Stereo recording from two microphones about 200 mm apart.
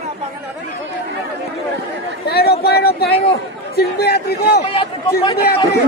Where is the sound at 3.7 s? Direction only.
55° left (ahead or behind).